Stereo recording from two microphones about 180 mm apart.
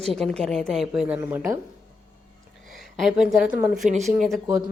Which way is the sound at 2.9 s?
Centre (ahead or behind).